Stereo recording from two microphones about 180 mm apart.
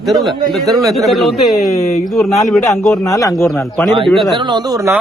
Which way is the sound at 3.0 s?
20° left (ahead or behind).